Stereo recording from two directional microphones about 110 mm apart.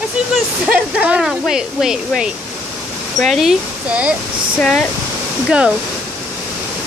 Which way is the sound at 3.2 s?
Centre (ahead or behind).